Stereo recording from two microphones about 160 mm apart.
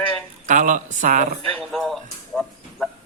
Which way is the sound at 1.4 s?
Centre (ahead or behind).